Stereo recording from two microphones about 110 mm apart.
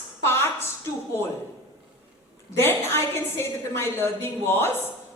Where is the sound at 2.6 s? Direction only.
20° left (ahead or behind).